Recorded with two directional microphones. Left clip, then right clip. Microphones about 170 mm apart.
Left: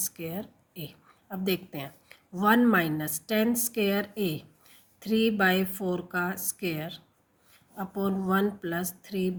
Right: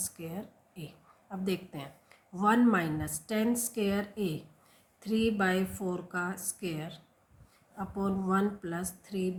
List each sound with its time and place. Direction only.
0.0 s a woman's voice: 40° left (ahead or behind)